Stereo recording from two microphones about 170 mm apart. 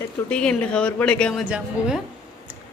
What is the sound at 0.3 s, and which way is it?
Speech, 5° left (ahead or behind).